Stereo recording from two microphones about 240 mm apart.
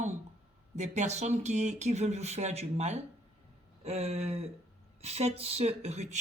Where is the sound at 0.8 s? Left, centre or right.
Right.